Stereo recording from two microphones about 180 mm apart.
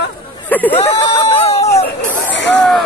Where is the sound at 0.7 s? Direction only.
35° left (ahead or behind).